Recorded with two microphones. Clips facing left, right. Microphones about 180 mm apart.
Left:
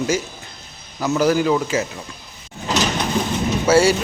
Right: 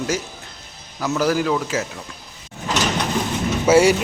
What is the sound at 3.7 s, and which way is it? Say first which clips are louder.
Speech: right 1 dB; 15° right (ahead or behind).